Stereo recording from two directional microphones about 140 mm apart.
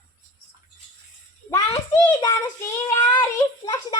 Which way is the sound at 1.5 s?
25° left (ahead or behind).